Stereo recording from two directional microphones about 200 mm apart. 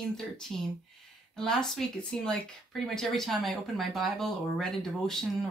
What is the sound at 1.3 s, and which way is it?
Speech, 5° left (ahead or behind).